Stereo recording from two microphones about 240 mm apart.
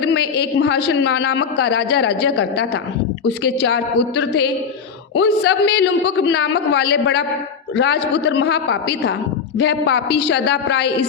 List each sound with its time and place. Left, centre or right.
0.0 s a man's voice: left